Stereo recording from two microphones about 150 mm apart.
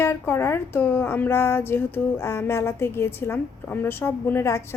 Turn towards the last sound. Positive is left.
turn(degrees=15)  # may be behind; listen again after turning